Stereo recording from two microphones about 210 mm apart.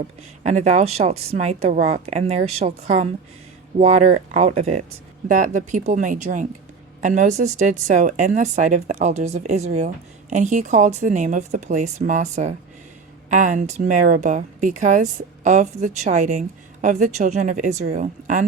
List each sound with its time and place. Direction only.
0.4 s a woman's voice: 35° right (ahead or behind)